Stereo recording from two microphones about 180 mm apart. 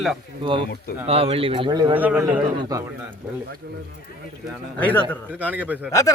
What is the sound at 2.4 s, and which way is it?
Speech, 25° right (ahead or behind).